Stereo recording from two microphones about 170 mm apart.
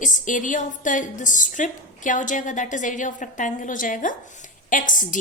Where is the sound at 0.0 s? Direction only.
50° left (ahead or behind).